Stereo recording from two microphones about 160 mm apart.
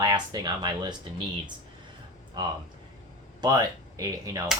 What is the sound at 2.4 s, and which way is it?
Speech, 30° right (ahead or behind).